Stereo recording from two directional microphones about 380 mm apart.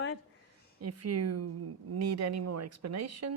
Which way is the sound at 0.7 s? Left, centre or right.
Right.